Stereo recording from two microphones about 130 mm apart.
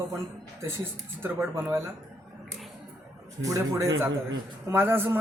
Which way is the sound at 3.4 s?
20° right (ahead or behind).